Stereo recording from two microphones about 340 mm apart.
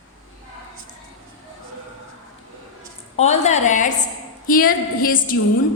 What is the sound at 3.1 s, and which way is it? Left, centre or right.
A woman's voice, centre.